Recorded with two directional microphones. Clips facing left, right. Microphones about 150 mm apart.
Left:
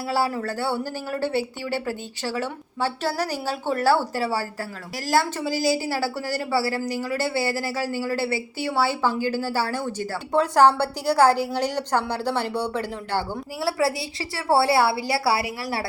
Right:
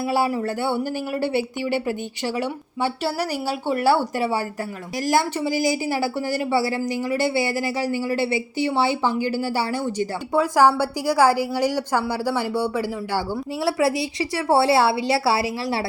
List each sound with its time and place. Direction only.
0.1 s speech: 15° right (ahead or behind)
13.7 s a woman's voice: 20° right (ahead or behind)